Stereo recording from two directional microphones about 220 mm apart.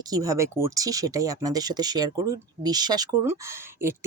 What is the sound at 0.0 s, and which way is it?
A woman's voice, 15° right (ahead or behind).